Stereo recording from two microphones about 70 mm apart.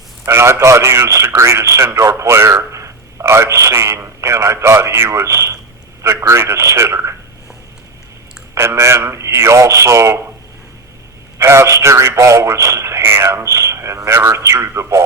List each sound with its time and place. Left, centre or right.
0.3 s a man's voice: right
8.5 s speech: right
11.3 s a man's voice: right